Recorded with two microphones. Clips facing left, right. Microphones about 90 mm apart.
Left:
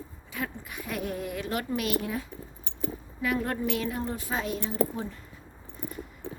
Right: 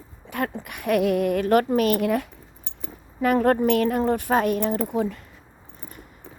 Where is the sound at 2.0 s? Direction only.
70° right (ahead or behind).